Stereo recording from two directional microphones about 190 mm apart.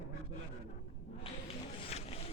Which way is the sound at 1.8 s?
30° left (ahead or behind).